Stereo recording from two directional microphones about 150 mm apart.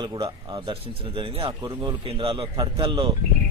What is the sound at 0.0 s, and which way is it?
Speech, 30° right (ahead or behind).